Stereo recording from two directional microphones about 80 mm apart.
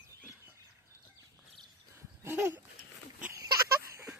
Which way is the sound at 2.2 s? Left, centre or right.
Right.